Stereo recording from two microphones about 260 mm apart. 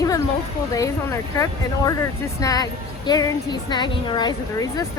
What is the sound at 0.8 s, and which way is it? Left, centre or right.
A woman's voice, centre.